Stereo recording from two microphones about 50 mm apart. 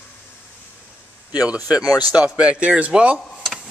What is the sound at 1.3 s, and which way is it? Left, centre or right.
Speech, right.